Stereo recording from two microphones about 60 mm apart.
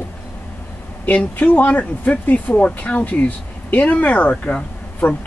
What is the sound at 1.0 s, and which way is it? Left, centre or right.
Speech, left.